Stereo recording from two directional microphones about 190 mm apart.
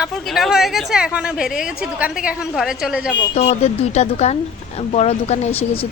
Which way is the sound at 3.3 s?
35° left (ahead or behind).